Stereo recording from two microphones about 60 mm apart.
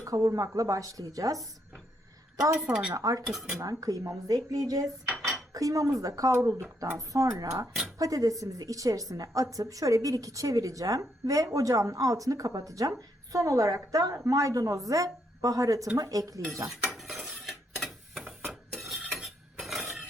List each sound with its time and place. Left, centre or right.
0.0 s a woman's voice: right
2.9 s a woman's voice: right
5.5 s a woman's voice: right
6.3 s a woman's voice: right
16.6 s cutlery: centre